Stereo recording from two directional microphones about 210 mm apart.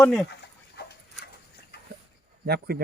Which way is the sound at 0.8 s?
50° left (ahead or behind).